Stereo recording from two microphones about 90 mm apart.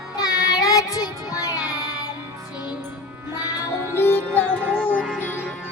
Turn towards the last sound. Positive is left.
turn(degrees=20)  # may be behind; listen again after turning